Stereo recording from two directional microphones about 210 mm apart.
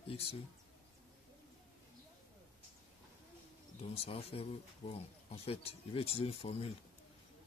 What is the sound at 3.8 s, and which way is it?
Speech, 30° left (ahead or behind).